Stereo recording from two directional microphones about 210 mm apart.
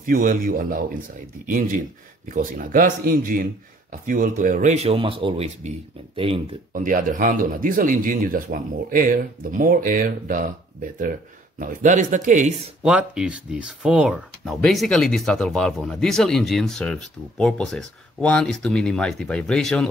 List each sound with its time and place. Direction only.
0.0 s a man's voice: 40° right (ahead or behind)
6.7 s speech: 40° right (ahead or behind)
11.6 s speech: 40° right (ahead or behind)
12.8 s speech: 5° right (ahead or behind)